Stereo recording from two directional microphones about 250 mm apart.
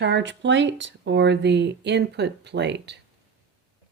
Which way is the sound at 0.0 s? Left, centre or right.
Right.